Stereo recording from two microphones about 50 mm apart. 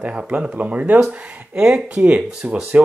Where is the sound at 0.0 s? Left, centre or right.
Right.